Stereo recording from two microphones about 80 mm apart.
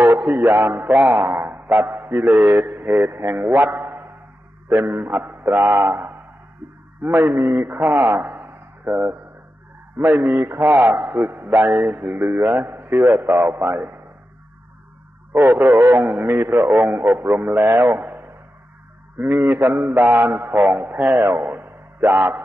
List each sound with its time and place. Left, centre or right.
0.0 s a man's voice: right
15.3 s a man's voice: right
19.2 s a man's voice: right